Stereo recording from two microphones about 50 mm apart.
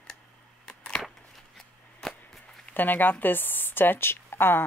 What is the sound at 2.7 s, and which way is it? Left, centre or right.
Speech, left.